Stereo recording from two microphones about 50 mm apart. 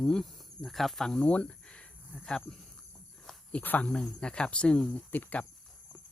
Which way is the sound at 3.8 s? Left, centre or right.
Centre.